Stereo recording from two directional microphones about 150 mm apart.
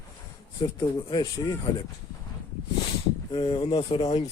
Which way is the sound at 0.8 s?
30° left (ahead or behind).